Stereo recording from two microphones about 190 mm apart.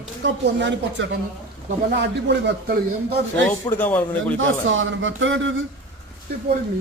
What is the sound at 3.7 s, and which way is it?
Speech, 10° left (ahead or behind).